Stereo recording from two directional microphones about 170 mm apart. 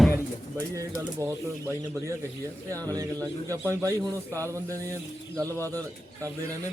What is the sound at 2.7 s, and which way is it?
Speech, 20° right (ahead or behind).